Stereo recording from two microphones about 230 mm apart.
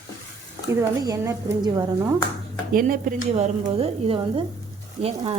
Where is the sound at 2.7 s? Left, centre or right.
Right.